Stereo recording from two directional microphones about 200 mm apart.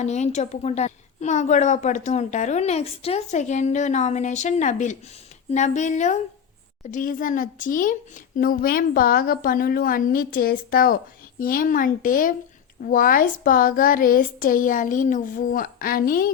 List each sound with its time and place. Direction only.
0.0 s a woman's voice: 35° left (ahead or behind)